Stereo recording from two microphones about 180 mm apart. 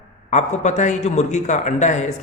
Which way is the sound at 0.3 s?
40° left (ahead or behind).